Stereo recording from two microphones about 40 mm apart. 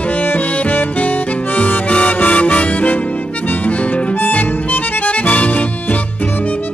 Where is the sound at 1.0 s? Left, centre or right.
Left.